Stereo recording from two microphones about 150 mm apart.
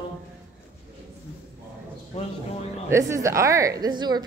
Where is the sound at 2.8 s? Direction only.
20° right (ahead or behind).